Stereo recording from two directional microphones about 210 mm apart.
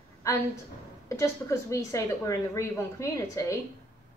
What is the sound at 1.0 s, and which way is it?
A woman's voice, 15° left (ahead or behind).